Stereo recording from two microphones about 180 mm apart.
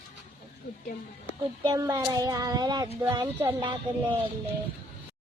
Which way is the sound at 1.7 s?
20° right (ahead or behind).